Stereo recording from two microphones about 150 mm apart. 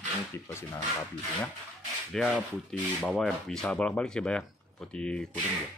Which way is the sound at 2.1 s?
5° left (ahead or behind).